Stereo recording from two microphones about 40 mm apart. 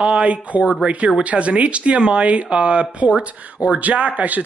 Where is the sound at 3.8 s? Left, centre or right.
Right.